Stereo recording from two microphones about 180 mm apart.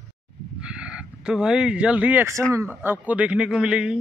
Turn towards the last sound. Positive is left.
turn(degrees=-5)  # may be behind; listen again after turning